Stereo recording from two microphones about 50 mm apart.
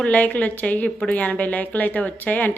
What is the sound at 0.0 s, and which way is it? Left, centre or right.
Speech, left.